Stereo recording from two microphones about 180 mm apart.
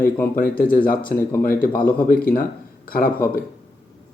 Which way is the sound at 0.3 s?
50° left (ahead or behind).